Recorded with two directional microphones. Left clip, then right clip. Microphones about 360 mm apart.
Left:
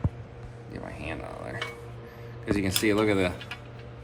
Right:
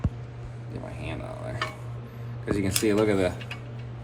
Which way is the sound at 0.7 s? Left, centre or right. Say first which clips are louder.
Left 1 dB; centre.